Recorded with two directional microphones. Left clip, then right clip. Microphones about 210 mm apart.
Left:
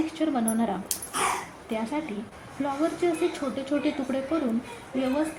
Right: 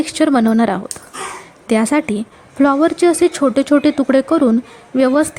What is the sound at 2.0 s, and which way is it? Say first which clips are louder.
Speech: right 14 dB; 50° right (ahead or behind).